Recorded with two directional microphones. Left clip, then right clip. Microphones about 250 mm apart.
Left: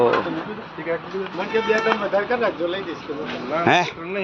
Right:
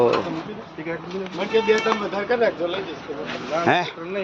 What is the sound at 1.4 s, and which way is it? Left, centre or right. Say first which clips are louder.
Speech: right 1 dB; right.